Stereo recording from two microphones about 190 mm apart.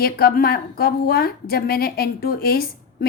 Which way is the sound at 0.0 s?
55° left (ahead or behind).